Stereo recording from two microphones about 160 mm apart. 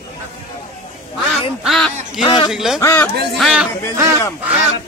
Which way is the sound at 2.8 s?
15° left (ahead or behind).